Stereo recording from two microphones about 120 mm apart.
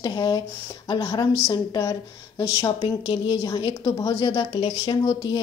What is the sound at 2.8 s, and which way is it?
Speech, 50° left (ahead or behind).